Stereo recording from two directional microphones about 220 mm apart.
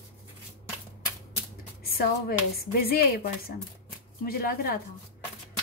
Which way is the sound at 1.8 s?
40° left (ahead or behind).